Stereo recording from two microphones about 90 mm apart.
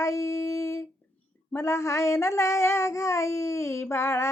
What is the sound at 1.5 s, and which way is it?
A child's voice, 30° left (ahead or behind).